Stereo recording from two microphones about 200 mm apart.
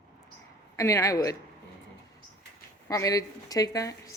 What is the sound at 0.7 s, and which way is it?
Speech, 15° left (ahead or behind).